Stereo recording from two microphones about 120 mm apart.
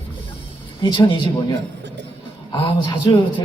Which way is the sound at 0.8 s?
40° left (ahead or behind).